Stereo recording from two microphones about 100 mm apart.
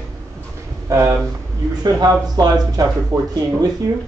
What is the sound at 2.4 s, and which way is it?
Speech, 45° right (ahead or behind).